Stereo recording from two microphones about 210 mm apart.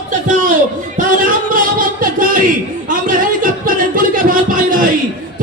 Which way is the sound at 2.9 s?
40° right (ahead or behind).